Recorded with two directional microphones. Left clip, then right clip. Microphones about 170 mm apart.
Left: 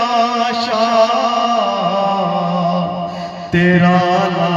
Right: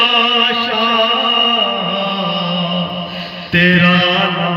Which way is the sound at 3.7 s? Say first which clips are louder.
Even; 30° right (ahead or behind).